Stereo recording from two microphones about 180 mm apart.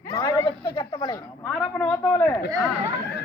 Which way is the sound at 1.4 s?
5° left (ahead or behind).